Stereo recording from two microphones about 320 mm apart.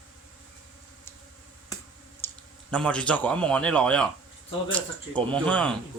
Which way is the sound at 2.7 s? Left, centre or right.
Centre.